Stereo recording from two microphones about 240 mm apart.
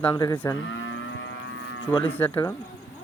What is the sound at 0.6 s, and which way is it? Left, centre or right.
Moo, left.